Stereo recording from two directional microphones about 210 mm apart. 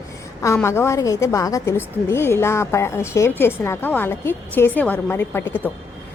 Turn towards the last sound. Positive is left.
turn(degrees=10)  # may be behind; listen again after turning